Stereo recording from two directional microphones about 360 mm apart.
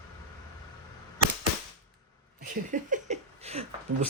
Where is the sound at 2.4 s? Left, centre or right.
Right.